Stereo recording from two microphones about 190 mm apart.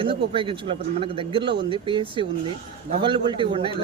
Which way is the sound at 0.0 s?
25° right (ahead or behind).